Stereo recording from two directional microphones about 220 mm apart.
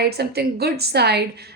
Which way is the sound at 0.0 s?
45° right (ahead or behind).